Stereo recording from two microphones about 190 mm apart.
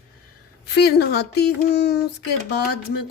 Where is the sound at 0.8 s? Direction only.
60° left (ahead or behind).